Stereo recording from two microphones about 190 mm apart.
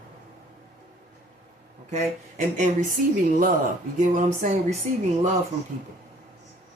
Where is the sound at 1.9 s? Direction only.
40° right (ahead or behind).